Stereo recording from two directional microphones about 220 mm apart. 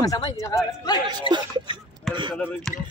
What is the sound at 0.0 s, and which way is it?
Speech, 15° left (ahead or behind).